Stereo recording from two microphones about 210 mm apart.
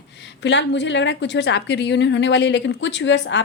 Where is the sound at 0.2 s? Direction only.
55° left (ahead or behind).